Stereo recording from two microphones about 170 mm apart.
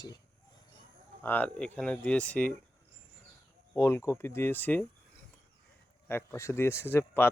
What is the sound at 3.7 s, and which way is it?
Speech, 15° left (ahead or behind).